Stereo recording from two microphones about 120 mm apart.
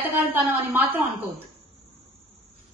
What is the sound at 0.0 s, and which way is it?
A woman's voice, 15° right (ahead or behind).